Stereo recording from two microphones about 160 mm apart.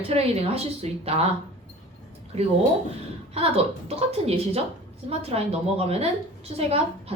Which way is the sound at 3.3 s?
40° right (ahead or behind).